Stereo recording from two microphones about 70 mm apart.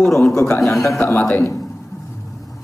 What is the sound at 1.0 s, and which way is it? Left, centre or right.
Speech, left.